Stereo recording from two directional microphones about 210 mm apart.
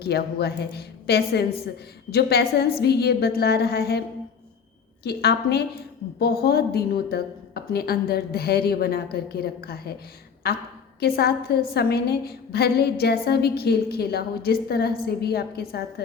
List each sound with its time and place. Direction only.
0.0 s a woman's voice: 50° left (ahead or behind)
5.0 s a woman's voice: 50° left (ahead or behind)